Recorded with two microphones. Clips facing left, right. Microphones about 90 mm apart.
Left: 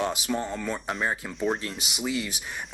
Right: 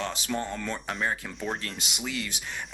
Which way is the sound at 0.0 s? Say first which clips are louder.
Left 3 dB; 10° left (ahead or behind).